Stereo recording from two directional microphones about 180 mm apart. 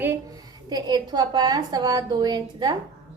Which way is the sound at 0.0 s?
15° right (ahead or behind).